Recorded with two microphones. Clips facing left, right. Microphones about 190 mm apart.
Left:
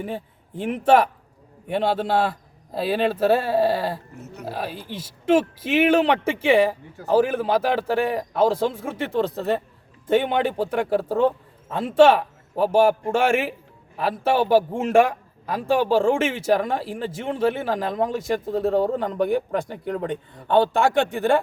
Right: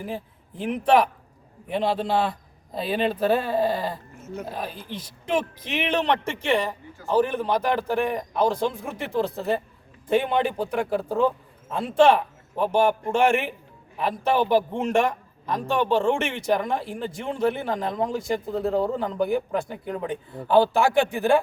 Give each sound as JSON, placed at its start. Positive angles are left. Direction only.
{"t": 0.0, "sound": "speech", "side_deg": 0}
{"t": 6.9, "sound": "a man's voice", "side_deg": 65}
{"t": 7.3, "sound": "speech", "side_deg": 5}